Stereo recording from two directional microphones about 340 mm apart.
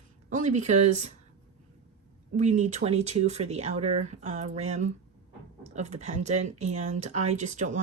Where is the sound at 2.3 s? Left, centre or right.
Centre.